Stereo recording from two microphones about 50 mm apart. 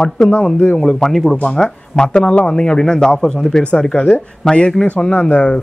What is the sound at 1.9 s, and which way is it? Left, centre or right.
A woman's voice, centre.